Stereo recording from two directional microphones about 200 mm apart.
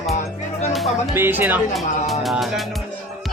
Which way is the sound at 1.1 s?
10° right (ahead or behind).